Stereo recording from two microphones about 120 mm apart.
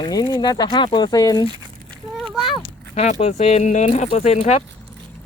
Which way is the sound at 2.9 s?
65° left (ahead or behind).